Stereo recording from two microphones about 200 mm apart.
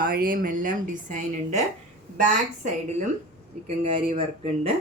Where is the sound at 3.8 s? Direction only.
25° right (ahead or behind).